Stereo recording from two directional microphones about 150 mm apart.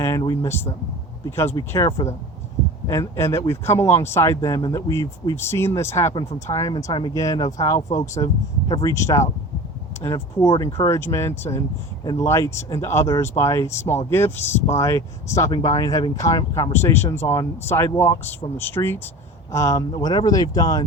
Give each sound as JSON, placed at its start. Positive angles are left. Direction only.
{"t": 0.0, "sound": "speech", "side_deg": 20}
{"t": 16.7, "sound": "speech", "side_deg": 15}